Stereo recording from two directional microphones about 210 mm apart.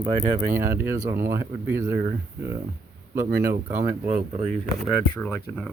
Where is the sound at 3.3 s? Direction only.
45° right (ahead or behind).